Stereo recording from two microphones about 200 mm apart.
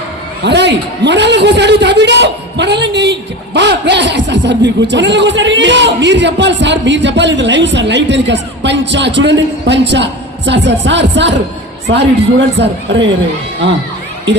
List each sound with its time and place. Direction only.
0.4 s a man's voice: 60° right (ahead or behind)